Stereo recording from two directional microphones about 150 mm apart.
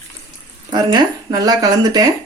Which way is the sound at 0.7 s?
30° right (ahead or behind).